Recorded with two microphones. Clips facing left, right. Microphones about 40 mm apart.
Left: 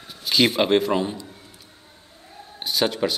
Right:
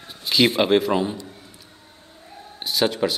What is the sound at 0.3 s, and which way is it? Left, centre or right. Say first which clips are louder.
Speech: right 1 dB; centre.